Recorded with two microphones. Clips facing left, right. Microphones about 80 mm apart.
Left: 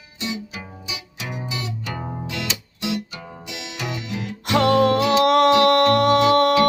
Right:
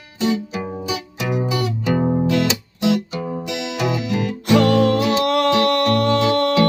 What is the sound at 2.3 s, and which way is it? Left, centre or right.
Music, right.